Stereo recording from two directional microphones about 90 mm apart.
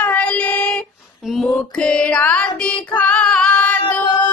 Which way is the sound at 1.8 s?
15° left (ahead or behind).